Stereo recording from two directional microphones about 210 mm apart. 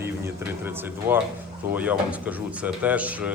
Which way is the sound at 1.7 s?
5° right (ahead or behind).